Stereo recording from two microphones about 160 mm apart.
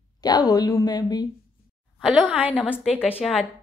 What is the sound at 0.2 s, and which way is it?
A woman's voice, 25° left (ahead or behind).